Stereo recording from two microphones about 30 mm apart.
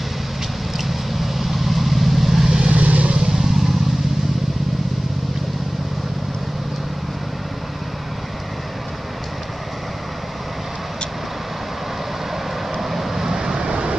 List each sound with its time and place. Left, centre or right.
0.7 s vehicle: centre
2.7 s vehicle: right
3.3 s vehicle: centre
12.7 s vehicle: centre; by 13.8 s right